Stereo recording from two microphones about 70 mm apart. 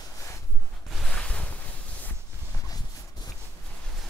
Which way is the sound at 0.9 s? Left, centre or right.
Centre.